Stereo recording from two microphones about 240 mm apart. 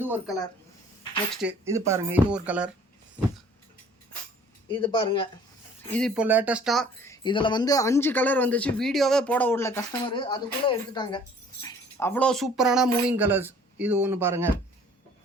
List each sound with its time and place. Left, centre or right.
0.0 s speech: centre
4.7 s speech: centre
5.9 s speech: centre
7.1 s speech: centre